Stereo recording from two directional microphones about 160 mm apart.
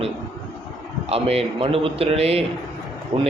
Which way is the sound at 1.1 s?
40° right (ahead or behind).